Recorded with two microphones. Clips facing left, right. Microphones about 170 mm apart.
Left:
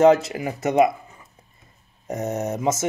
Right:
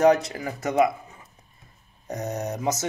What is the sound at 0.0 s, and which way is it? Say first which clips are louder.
Speech: left 3 dB; 25° left (ahead or behind).